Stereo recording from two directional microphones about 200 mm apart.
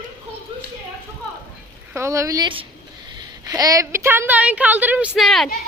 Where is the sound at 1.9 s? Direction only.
15° right (ahead or behind).